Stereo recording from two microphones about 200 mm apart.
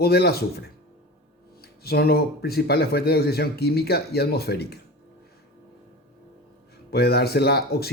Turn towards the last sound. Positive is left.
turn(degrees=50)  # may be behind; listen again after turning